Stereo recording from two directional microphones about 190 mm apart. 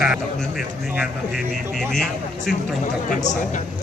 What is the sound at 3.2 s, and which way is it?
Speech, 40° left (ahead or behind).